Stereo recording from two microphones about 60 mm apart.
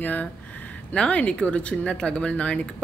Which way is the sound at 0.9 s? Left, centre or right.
Centre.